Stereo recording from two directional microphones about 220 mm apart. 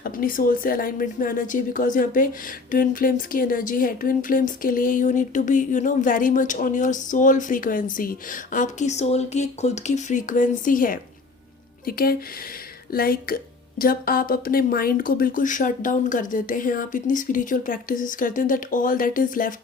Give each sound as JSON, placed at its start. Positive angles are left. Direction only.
{"t": 0.0, "sound": "speech", "side_deg": 40}